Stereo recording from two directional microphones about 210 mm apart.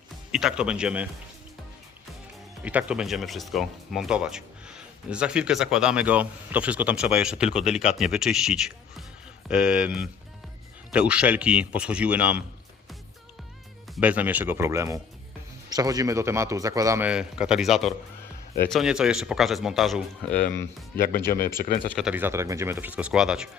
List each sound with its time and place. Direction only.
0.3 s speech: 5° right (ahead or behind)
2.6 s speech: 5° right (ahead or behind)
7.7 s speech: 35° left (ahead or behind)
7.9 s speech: centre (ahead or behind)
13.9 s a man's voice: 5° right (ahead or behind); by 21.0 s 10° left (ahead or behind)
21.2 s speech: 45° left (ahead or behind)
21.9 s a man's voice: 5° right (ahead or behind)